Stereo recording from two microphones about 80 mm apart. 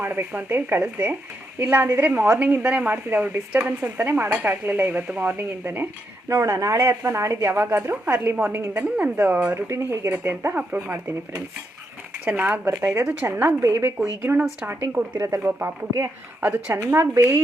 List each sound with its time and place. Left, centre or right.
0.0 s speech: right
8.7 s speech: centre
9.5 s speech: right
10.1 s speech: right
10.8 s speech: right
12.2 s speech: centre
16.7 s speech: right